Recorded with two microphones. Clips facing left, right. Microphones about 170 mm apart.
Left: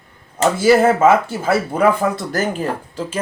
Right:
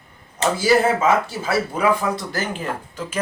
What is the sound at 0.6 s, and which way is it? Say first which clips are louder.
Speech: left 5 dB; 55° left (ahead or behind).